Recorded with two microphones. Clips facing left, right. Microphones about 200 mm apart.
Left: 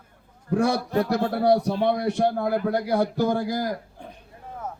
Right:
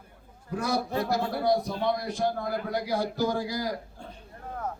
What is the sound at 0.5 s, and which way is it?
A man's voice, 65° left (ahead or behind).